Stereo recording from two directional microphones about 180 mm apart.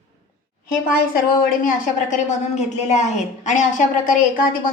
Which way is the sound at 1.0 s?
55° left (ahead or behind).